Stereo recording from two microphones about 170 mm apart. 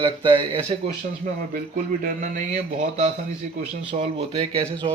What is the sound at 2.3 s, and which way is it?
A man's voice, 40° right (ahead or behind).